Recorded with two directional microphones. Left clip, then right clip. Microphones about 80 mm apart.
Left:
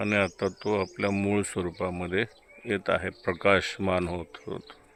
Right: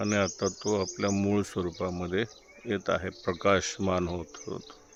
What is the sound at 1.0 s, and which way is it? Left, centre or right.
Speech, right.